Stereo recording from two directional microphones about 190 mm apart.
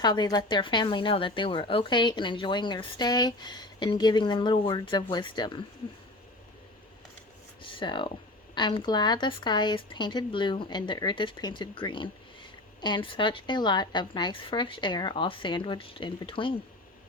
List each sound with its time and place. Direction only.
0.0 s speech: 20° left (ahead or behind)
7.6 s speech: 25° left (ahead or behind)